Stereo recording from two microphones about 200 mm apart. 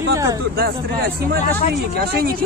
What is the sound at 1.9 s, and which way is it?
Speech, 50° right (ahead or behind).